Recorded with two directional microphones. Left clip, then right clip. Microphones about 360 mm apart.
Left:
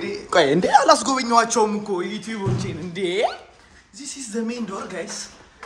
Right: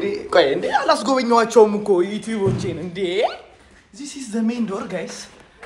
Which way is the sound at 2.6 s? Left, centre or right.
Centre.